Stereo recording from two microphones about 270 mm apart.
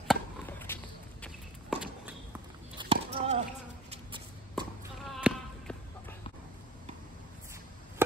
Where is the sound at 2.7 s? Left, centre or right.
Right.